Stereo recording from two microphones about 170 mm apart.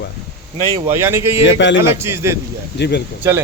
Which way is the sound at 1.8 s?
15° right (ahead or behind).